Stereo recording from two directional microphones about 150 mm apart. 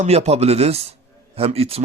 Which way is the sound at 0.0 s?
45° right (ahead or behind).